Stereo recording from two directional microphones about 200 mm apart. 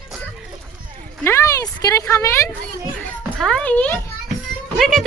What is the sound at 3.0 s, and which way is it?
Music, 5° left (ahead or behind).